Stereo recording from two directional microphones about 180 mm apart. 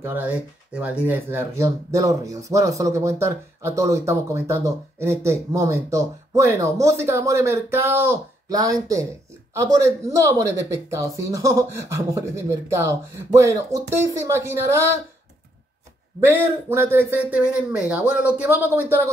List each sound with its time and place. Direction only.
0.0 s speech: 10° right (ahead or behind)
16.2 s speech: 10° right (ahead or behind)